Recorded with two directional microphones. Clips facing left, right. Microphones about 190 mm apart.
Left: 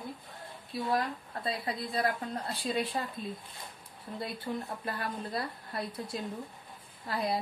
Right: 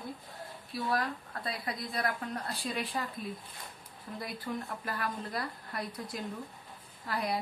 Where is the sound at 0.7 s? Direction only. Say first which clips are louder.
Left 2 dB; 25° left (ahead or behind).